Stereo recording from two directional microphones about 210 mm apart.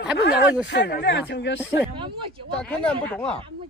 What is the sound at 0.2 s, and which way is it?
Speech, 55° left (ahead or behind).